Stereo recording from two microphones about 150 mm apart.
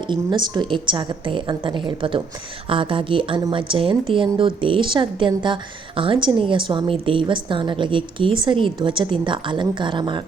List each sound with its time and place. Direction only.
0.1 s a woman's voice: 30° right (ahead or behind)